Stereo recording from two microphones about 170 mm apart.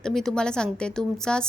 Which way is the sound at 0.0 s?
Centre (ahead or behind).